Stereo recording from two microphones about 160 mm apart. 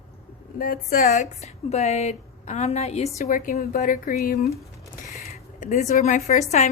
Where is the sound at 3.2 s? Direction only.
55° left (ahead or behind).